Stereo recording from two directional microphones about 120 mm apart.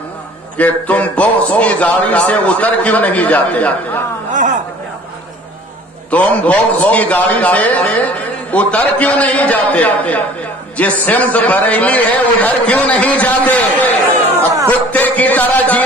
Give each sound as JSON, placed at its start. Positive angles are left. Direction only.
{"t": 0.6, "sound": "a man's voice", "side_deg": 10}
{"t": 4.3, "sound": "a sound", "side_deg": -90}
{"t": 6.0, "sound": "a man's voice", "side_deg": 10}